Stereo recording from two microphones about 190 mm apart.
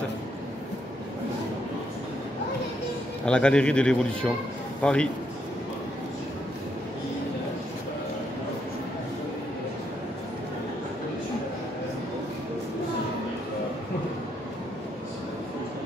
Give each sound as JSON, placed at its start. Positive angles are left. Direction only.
{"t": 3.3, "sound": "a man's voice", "side_deg": 5}